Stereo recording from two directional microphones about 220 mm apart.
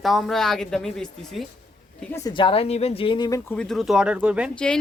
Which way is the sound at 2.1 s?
20° left (ahead or behind).